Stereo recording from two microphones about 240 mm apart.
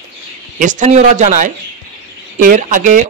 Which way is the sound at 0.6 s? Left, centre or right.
Right.